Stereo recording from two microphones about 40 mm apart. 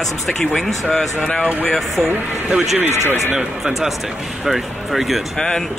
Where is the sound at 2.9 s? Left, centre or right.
Left.